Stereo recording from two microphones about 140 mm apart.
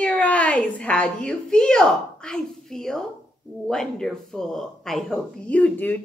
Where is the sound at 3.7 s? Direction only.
5° left (ahead or behind).